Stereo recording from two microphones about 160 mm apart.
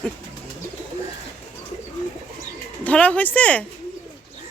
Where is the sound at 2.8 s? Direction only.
10° left (ahead or behind).